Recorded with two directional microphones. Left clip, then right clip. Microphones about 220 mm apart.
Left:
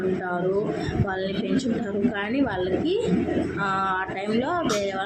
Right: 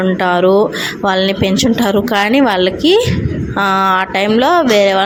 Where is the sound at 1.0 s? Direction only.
40° right (ahead or behind).